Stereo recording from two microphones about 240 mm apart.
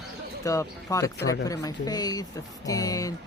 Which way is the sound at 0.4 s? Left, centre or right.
Centre.